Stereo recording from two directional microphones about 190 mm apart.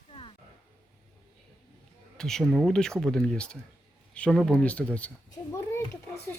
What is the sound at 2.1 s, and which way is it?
A child's voice, 5° left (ahead or behind).